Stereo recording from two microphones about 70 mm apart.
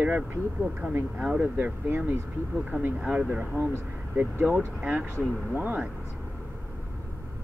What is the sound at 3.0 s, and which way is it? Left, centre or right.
A man's voice, centre.